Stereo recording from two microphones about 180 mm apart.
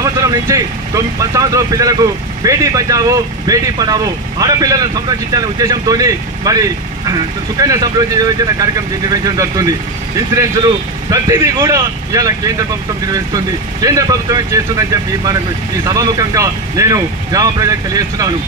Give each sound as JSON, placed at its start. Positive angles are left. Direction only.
{"t": 0.0, "sound": "speech", "side_deg": -20}